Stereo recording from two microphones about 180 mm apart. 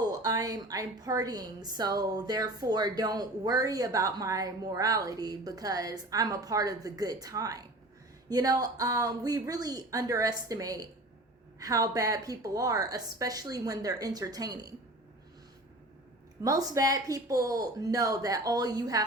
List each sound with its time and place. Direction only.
0.0 s a woman's voice: 20° right (ahead or behind)
16.4 s a woman's voice: 20° right (ahead or behind)